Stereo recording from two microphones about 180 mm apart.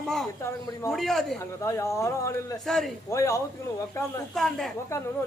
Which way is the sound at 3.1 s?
15° left (ahead or behind).